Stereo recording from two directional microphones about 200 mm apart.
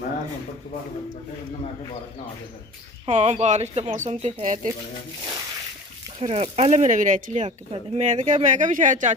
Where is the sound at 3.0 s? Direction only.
35° right (ahead or behind).